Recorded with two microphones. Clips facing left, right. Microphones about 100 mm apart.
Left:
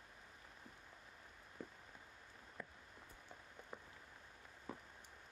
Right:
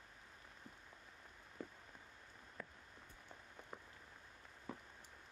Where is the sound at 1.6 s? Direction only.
5° left (ahead or behind).